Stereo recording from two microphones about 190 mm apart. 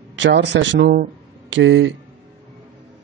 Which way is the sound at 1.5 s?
75° right (ahead or behind).